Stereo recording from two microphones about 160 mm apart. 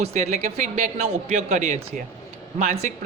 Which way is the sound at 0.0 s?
45° right (ahead or behind).